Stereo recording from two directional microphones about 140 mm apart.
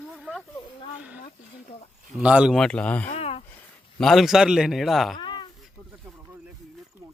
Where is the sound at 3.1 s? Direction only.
45° left (ahead or behind).